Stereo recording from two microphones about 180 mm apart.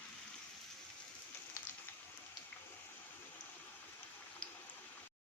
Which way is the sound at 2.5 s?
10° left (ahead or behind).